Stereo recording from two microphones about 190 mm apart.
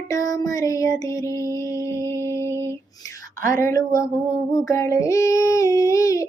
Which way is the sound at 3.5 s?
15° left (ahead or behind).